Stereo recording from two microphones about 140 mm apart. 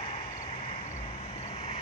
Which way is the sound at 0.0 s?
45° left (ahead or behind).